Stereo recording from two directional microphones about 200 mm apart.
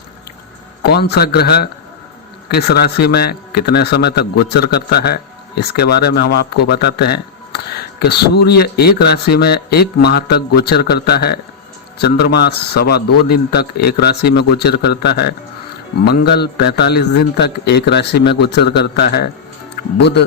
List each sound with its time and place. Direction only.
0.8 s a man's voice: 55° left (ahead or behind)